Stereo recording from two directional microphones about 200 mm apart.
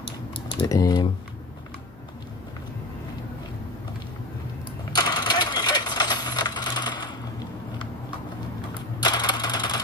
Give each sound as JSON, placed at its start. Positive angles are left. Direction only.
{"t": 0.6, "sound": "speech", "side_deg": 20}
{"t": 4.9, "sound": "a sound", "side_deg": 20}
{"t": 9.0, "sound": "coin", "side_deg": 20}